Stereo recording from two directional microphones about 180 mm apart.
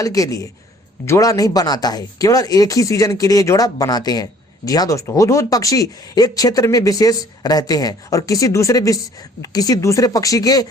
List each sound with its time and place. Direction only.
0.0 s speech: 20° left (ahead or behind)